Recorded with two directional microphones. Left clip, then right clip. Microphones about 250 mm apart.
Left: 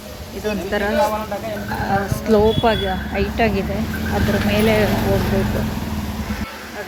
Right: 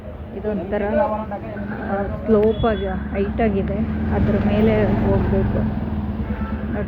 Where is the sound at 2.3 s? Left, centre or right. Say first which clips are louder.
Left 2 dB; centre.